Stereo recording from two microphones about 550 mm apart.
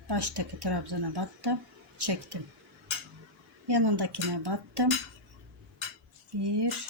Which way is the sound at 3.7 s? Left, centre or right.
Right.